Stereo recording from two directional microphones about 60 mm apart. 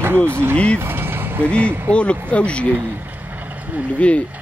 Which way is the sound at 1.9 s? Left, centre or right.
Centre.